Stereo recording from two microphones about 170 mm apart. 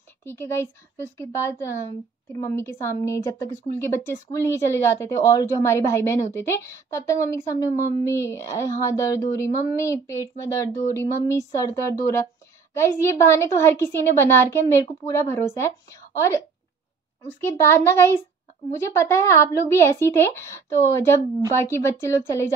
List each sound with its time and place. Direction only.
0.2 s speech: 15° left (ahead or behind)
17.4 s speech: 15° left (ahead or behind)